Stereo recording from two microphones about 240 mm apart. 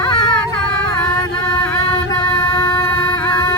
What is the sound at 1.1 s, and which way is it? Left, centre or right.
Music, centre.